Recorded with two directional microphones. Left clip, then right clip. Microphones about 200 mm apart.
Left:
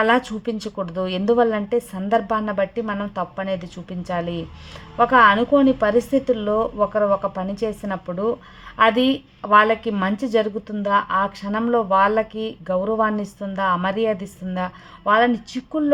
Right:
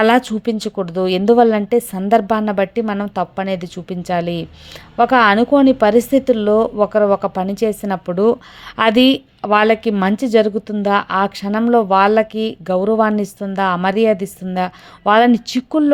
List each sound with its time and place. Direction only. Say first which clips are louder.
0.0 s speech: right 5 dB; 25° right (ahead or behind)